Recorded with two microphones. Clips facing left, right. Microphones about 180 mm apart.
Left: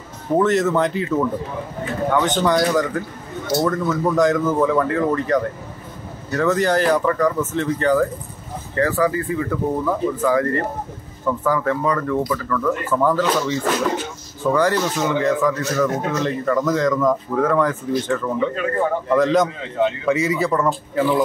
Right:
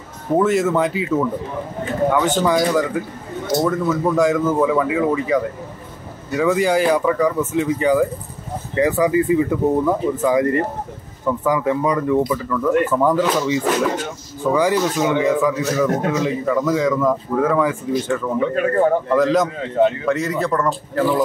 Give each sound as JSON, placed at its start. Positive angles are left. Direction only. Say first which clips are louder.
{"t": 0.4, "sound": "speech", "louder": "even", "side_deg": -10}